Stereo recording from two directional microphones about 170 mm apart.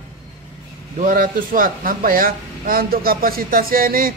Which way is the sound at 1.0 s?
55° right (ahead or behind).